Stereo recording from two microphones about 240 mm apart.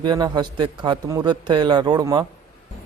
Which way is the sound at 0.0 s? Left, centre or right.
Centre.